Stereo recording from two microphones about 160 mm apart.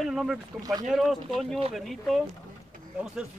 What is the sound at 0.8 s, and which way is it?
Speech, centre (ahead or behind).